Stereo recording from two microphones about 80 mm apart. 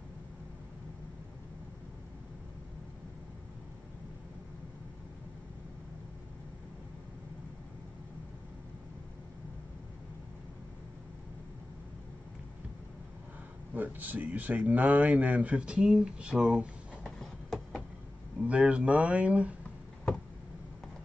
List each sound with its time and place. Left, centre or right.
13.7 s speech: right
17.2 s a sound: centre
18.4 s speech: centre